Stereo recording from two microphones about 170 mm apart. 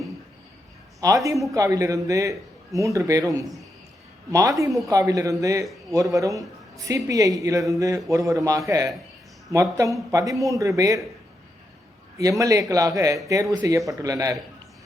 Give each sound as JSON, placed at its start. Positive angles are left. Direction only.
{"t": 1.0, "sound": "a woman's voice", "side_deg": -20}
{"t": 3.4, "sound": "a man's voice", "side_deg": 0}
{"t": 4.3, "sound": "a woman's voice", "side_deg": -20}
{"t": 12.4, "sound": "a woman's voice", "side_deg": -20}